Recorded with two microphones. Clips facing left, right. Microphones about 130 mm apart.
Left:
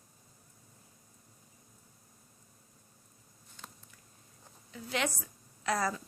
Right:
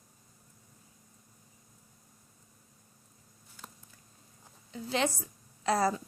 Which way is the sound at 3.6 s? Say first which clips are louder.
Right 1 dB; 10° right (ahead or behind).